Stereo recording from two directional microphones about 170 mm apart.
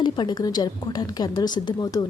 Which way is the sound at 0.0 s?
25° left (ahead or behind).